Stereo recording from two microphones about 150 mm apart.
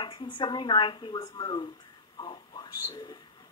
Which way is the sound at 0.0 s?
30° left (ahead or behind).